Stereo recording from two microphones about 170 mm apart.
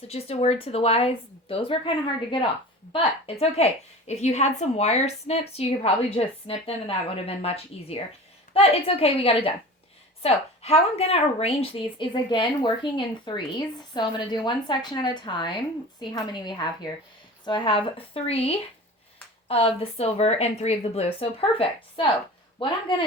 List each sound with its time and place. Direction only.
0.1 s a woman's voice: 35° left (ahead or behind)
2.9 s a woman's voice: 35° left (ahead or behind)